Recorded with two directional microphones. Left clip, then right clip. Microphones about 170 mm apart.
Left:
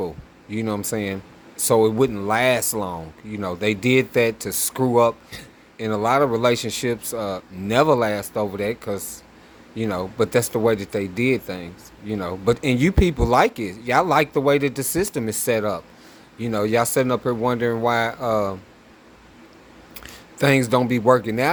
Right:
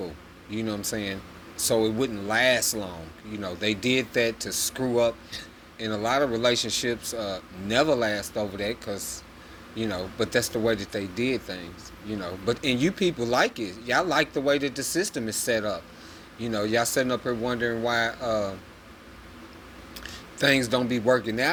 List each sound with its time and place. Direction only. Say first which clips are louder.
0.5 s speech: left 5 dB; 50° left (ahead or behind)
20.0 s speech: left 4 dB; 55° left (ahead or behind)